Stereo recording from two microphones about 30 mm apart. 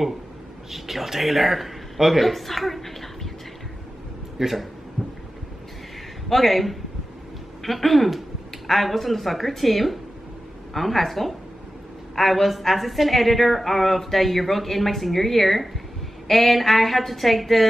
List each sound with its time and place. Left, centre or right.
0.7 s speech: centre
4.4 s a woman's voice: centre
5.0 s a sound: right
6.2 s a woman's voice: centre